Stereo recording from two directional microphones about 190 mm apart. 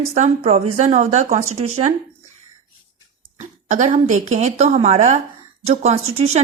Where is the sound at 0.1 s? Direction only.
35° right (ahead or behind).